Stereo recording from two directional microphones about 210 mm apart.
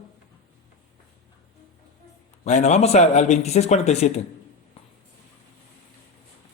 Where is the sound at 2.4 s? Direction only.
35° left (ahead or behind).